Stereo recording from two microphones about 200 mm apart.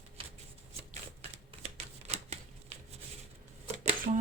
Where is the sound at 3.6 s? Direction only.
35° right (ahead or behind).